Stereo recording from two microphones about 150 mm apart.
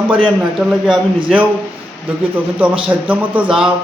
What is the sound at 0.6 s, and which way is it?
A man's voice, 5° right (ahead or behind).